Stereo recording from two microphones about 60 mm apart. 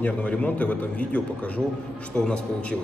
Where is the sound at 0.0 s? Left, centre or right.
Left.